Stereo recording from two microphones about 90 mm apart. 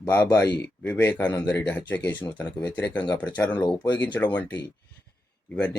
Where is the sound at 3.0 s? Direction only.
50° left (ahead or behind).